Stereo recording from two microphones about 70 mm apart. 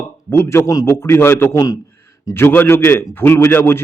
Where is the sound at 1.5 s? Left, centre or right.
Left.